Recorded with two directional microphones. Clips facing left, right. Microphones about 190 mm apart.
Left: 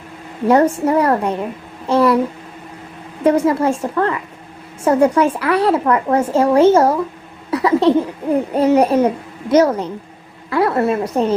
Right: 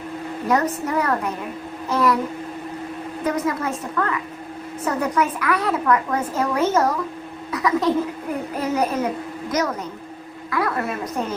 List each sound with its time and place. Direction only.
0.4 s a woman's voice: 30° left (ahead or behind)
3.2 s a woman's voice: 30° left (ahead or behind)
7.5 s a sound: 30° left (ahead or behind)
8.5 s a woman's voice: 30° left (ahead or behind)